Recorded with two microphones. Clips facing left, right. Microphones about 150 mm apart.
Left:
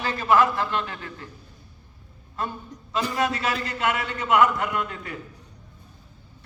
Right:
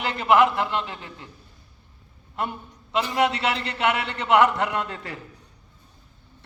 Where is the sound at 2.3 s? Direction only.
20° right (ahead or behind).